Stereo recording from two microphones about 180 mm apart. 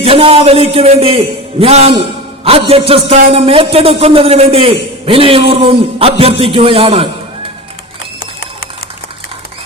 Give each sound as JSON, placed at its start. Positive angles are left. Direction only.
{"t": 0.0, "sound": "a man's voice", "side_deg": -30}